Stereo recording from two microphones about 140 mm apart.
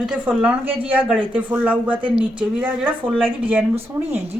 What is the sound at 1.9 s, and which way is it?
Speech, 35° right (ahead or behind).